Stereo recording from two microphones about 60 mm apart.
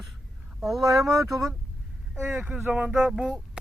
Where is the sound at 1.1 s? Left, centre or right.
Right.